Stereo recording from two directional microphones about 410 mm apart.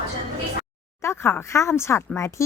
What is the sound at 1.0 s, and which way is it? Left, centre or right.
Speech, centre.